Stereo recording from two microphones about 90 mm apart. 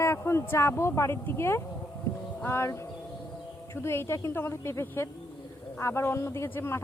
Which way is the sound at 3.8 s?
30° left (ahead or behind).